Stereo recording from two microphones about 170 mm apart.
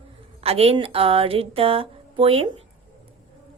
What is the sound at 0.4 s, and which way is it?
Speech, 35° right (ahead or behind).